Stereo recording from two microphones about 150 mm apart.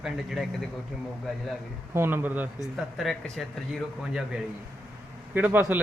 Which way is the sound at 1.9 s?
15° right (ahead or behind).